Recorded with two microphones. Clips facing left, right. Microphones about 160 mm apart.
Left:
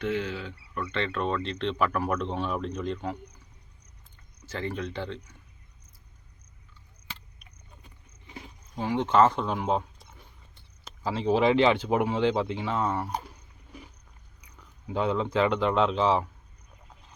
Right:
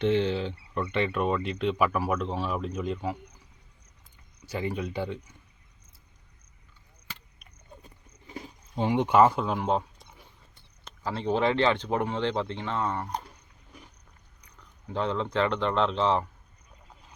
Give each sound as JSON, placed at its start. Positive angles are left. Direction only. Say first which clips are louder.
{"t": 0.0, "sound": "speech", "louder": "right 5 dB", "side_deg": -25}
{"t": 0.9, "sound": "speech", "louder": "right 2 dB", "side_deg": -15}
{"t": 4.4, "sound": "speech", "louder": "right 2 dB", "side_deg": -10}
{"t": 8.3, "sound": "cricket", "louder": "right 4 dB", "side_deg": -30}
{"t": 8.9, "sound": "speech", "louder": "right 1 dB", "side_deg": -15}
{"t": 14.4, "sound": "speech", "louder": "left 3 dB", "side_deg": 10}